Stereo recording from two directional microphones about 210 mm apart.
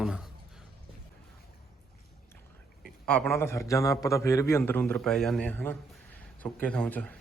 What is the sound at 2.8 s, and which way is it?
A man's voice, 5° left (ahead or behind).